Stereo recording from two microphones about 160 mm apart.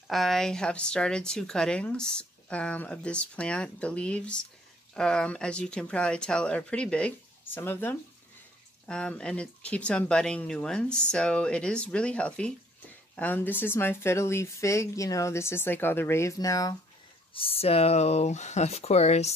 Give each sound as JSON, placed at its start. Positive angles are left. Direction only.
{"t": 0.1, "sound": "speech", "side_deg": 0}
{"t": 17.3, "sound": "speech", "side_deg": 35}